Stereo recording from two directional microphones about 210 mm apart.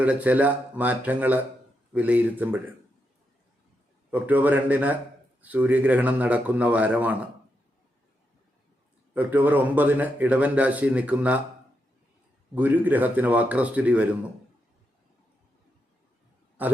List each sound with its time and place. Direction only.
0.0 s speech: 5° right (ahead or behind)
4.1 s speech: 10° right (ahead or behind)
9.1 s speech: 10° right (ahead or behind)
12.5 s speech: 10° right (ahead or behind)
16.6 s speech: 5° right (ahead or behind)